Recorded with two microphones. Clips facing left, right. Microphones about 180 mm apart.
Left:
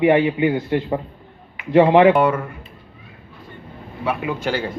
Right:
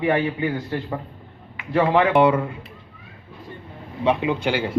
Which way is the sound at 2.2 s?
15° right (ahead or behind).